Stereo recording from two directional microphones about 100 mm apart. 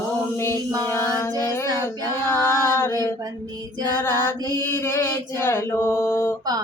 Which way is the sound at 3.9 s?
20° left (ahead or behind).